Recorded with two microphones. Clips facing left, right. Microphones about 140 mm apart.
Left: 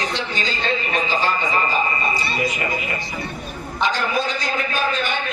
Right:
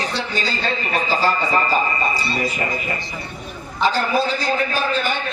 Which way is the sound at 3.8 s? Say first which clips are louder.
Right 3 dB; 35° right (ahead or behind).